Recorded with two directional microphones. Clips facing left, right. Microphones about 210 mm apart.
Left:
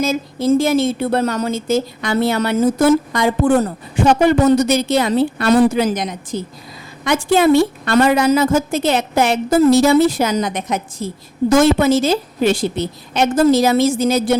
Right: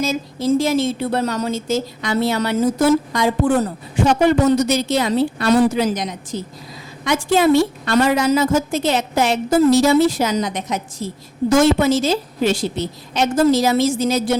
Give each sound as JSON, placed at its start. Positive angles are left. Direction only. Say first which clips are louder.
{"t": 0.0, "sound": "a woman's voice", "louder": "left 3 dB", "side_deg": 55}
{"t": 4.7, "sound": "a woman's voice", "louder": "left 2 dB", "side_deg": 55}